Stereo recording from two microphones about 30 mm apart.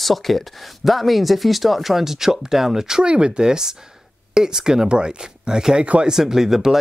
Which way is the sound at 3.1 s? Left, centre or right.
Right.